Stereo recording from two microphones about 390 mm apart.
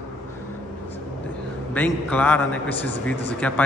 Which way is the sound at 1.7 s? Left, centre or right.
Centre.